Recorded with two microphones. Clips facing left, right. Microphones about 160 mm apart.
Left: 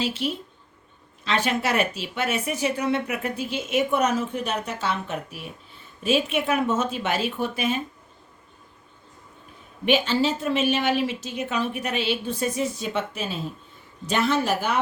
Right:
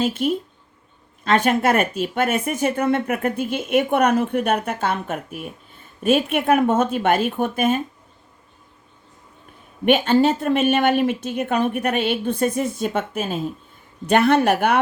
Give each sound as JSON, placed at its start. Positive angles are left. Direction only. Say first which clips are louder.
{"t": 0.0, "sound": "speech", "louder": "right 6 dB", "side_deg": -50}
{"t": 9.8, "sound": "a woman's voice", "louder": "right 6 dB", "side_deg": -55}